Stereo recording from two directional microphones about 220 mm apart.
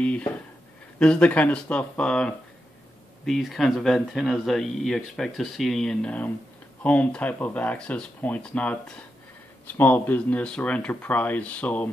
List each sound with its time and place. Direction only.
0.0 s speech: 5° left (ahead or behind)